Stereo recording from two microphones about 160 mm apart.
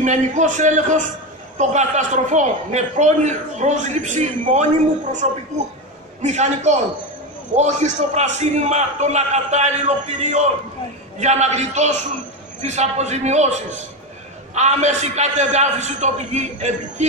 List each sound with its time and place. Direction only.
0.0 s a man's voice: 50° right (ahead or behind)